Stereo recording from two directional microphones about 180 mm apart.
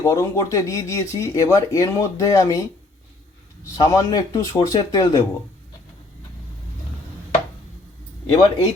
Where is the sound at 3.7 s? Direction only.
20° left (ahead or behind).